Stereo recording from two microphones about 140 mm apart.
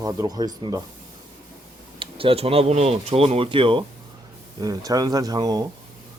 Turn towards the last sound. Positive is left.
turn(degrees=-30)  # may be behind; listen again after turning